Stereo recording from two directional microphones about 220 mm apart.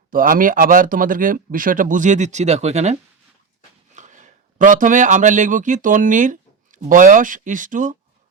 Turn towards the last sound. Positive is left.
turn(degrees=-35)  # may be behind; listen again after turning